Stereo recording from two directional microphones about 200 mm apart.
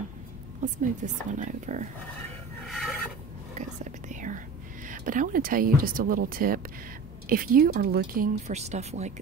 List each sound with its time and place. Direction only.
0.6 s speech: 35° right (ahead or behind)
2.7 s filing: centre (ahead or behind)
3.5 s whispering: 35° right (ahead or behind)
4.8 s a woman's voice: 40° right (ahead or behind)